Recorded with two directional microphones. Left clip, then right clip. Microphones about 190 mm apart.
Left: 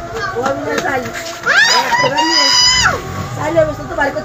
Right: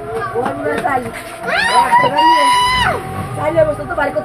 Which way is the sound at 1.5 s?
15° right (ahead or behind).